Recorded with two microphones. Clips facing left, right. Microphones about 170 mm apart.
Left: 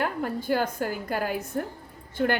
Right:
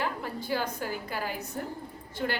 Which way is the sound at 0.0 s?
50° left (ahead or behind).